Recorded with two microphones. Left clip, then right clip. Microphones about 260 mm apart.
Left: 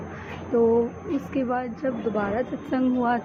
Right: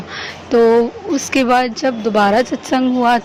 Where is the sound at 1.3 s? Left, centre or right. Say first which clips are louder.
Right 15 dB; right.